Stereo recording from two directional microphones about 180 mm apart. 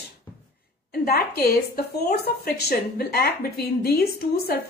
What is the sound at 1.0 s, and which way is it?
Speech, 60° left (ahead or behind).